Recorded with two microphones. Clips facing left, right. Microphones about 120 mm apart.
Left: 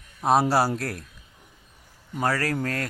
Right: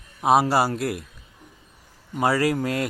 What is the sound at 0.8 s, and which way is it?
Speech, 5° right (ahead or behind).